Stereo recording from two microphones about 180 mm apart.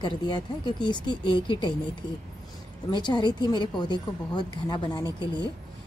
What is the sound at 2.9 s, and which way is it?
Speech, 25° left (ahead or behind).